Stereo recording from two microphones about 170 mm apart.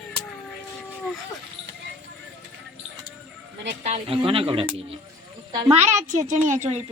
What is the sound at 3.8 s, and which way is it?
A woman's voice, 35° right (ahead or behind).